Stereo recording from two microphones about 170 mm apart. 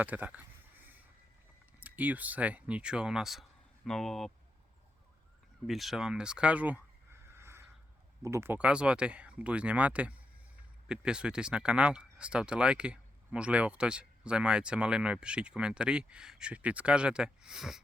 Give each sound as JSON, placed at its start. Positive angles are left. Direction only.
{"t": 0.0, "sound": "a sound", "side_deg": -10}
{"t": 1.8, "sound": "speech", "side_deg": -10}
{"t": 5.6, "sound": "speech", "side_deg": 0}